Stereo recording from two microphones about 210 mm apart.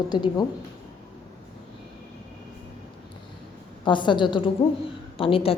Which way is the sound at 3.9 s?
20° left (ahead or behind).